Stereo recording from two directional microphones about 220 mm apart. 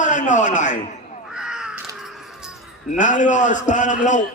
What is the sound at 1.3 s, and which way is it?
Crow, 5° right (ahead or behind).